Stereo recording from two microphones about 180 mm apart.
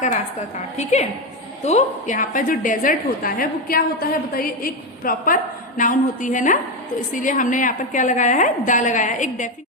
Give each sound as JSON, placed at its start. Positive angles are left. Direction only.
{"t": 0.8, "sound": "a woman's voice", "side_deg": 40}